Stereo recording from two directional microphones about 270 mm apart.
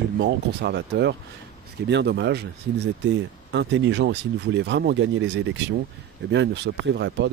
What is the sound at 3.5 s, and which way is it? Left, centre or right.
Speech, right.